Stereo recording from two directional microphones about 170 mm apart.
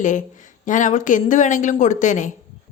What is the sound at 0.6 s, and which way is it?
A woman's voice, 50° left (ahead or behind).